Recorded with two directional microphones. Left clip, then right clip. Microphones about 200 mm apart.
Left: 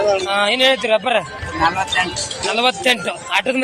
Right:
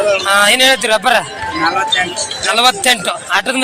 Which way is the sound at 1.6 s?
45° left (ahead or behind).